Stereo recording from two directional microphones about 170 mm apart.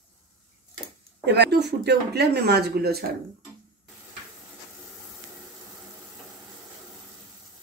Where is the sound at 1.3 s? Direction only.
80° right.